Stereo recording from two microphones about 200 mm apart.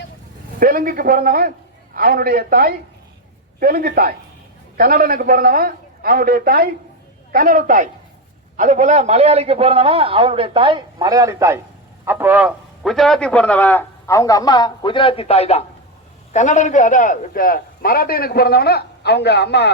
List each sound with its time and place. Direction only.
0.6 s a man's voice: 45° right (ahead or behind); by 19.7 s 55° left (ahead or behind)